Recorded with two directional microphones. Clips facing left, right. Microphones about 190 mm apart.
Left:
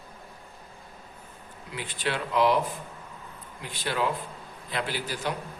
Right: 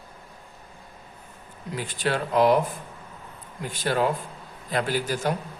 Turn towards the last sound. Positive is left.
turn(degrees=-45)  # may be behind; listen again after turning